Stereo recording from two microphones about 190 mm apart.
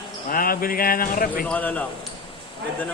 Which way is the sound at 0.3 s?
50° left (ahead or behind).